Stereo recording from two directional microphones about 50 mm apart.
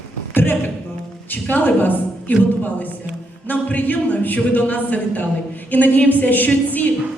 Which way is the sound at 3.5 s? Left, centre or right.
Left.